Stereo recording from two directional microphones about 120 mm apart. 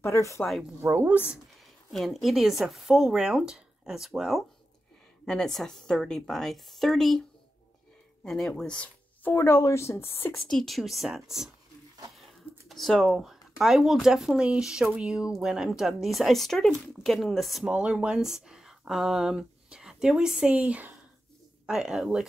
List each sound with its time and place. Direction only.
0.0 s speech: 25° left (ahead or behind)
0.8 s speech: 15° right (ahead or behind)
1.9 s speech: centre (ahead or behind)
9.3 s speech: 20° left (ahead or behind)
10.3 s speech: 5° left (ahead or behind)